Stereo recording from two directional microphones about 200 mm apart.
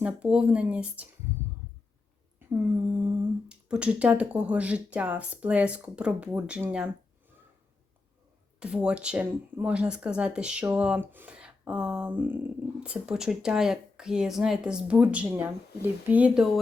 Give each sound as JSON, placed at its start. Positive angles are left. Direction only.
{"t": 0.0, "sound": "speech", "side_deg": -5}
{"t": 2.5, "sound": "speech", "side_deg": -10}
{"t": 8.5, "sound": "speech", "side_deg": -5}